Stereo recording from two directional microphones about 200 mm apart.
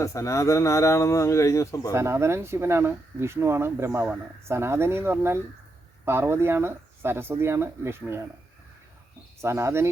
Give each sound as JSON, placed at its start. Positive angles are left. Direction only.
{"t": 0.0, "sound": "speech", "side_deg": 15}
{"t": 1.9, "sound": "speech", "side_deg": -15}
{"t": 9.4, "sound": "speech", "side_deg": -15}